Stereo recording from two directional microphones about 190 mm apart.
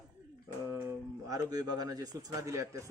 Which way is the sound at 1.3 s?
20° right (ahead or behind).